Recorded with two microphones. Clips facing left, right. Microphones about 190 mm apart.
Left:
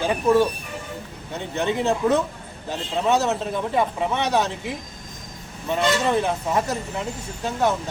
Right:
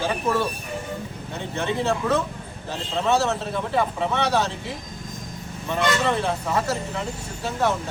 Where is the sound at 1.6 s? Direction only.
15° left (ahead or behind).